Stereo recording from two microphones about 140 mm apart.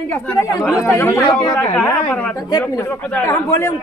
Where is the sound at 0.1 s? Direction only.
10° left (ahead or behind).